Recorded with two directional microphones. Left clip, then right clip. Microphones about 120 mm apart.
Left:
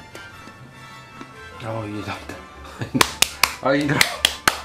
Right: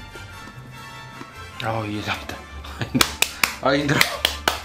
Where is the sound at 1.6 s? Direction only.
40° right (ahead or behind).